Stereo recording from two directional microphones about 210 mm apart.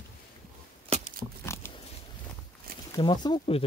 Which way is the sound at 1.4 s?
10° left (ahead or behind).